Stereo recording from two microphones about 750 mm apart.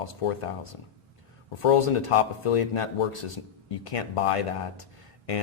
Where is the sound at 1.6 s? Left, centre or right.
Left.